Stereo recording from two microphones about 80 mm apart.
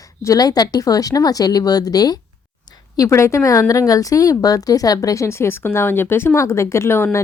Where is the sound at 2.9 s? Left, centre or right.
Left.